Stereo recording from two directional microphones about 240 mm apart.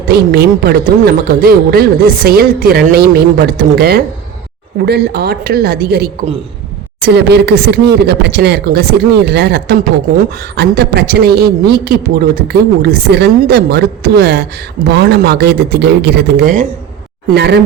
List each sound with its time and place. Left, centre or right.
0.1 s speech: right